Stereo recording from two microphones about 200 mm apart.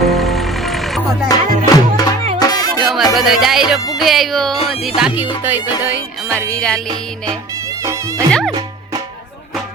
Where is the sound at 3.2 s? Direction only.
Centre (ahead or behind).